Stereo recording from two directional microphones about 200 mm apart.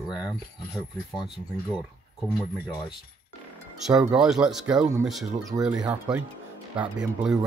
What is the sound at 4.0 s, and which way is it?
Speech, 5° right (ahead or behind).